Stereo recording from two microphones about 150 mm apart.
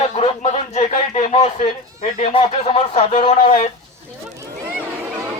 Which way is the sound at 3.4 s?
55° left (ahead or behind).